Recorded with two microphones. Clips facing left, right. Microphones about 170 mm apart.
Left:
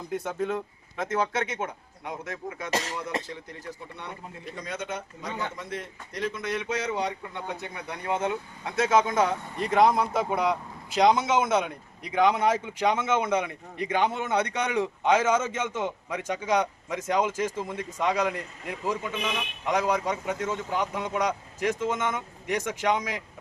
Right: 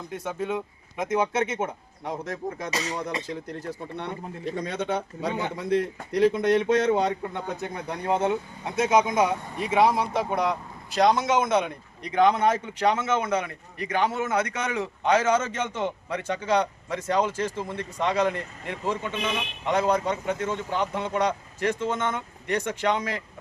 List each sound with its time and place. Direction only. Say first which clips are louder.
0.1 s a man's voice: left 1 dB; centre (ahead or behind)
0.9 s speech: right 3 dB; 20° right (ahead or behind)
2.0 s speech: right 4 dB; 35° right (ahead or behind)
4.5 s speech: right 5 dB; 65° right (ahead or behind)
6.1 s a man's voice: right 10 dB; 60° right (ahead or behind); by 23.2 s 10° left (ahead or behind)